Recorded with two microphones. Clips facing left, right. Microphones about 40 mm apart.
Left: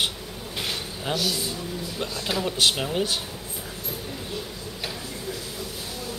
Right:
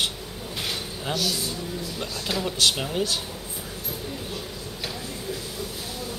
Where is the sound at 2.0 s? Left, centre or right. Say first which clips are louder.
Left 2 dB; centre.